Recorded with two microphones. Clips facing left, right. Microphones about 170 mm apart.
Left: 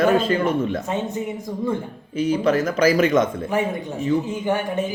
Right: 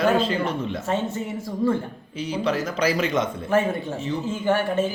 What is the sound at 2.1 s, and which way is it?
Speech, 50° left (ahead or behind).